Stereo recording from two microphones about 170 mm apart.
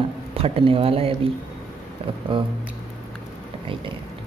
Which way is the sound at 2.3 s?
30° right (ahead or behind).